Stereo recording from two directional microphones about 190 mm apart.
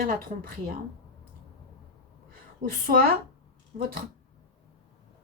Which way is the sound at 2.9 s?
50° right (ahead or behind).